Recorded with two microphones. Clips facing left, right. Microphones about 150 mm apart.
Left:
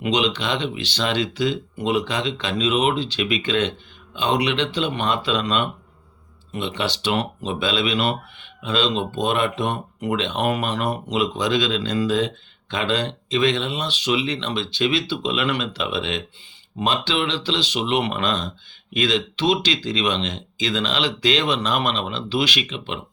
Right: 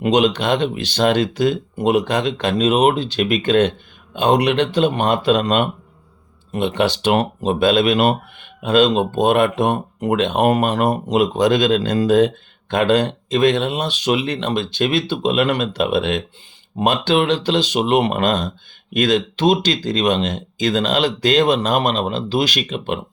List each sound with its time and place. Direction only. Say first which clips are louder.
0.0 s speech: right 6 dB; 50° right (ahead or behind)